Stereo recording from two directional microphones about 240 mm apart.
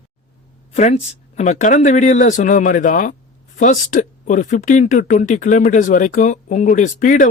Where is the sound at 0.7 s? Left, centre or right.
Left.